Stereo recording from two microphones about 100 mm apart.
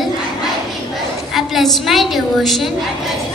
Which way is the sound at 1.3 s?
Centre (ahead or behind).